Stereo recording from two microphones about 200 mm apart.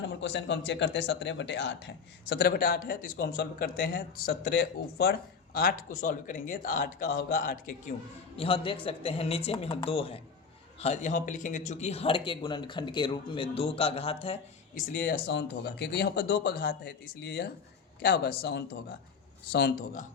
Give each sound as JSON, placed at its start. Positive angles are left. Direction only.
{"t": 0.0, "sound": "speech", "side_deg": 65}
{"t": 8.4, "sound": "speech", "side_deg": 25}
{"t": 14.8, "sound": "speech", "side_deg": 40}
{"t": 15.3, "sound": "a man's voice", "side_deg": 60}